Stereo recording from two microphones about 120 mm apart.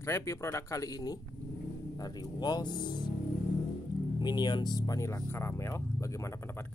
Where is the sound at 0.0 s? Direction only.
25° left (ahead or behind).